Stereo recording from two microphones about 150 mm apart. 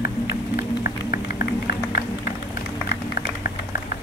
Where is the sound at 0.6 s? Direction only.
70° left (ahead or behind).